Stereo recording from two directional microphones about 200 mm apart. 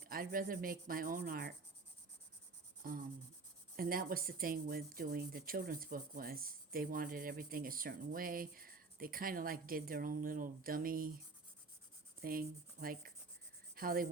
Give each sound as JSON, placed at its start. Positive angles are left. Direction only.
{"t": 0.1, "sound": "speech", "side_deg": -45}
{"t": 2.8, "sound": "speech", "side_deg": -45}
{"t": 12.2, "sound": "speech", "side_deg": -45}